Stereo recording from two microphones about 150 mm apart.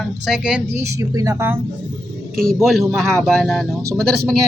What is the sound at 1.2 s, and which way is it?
Speech, 15° right (ahead or behind).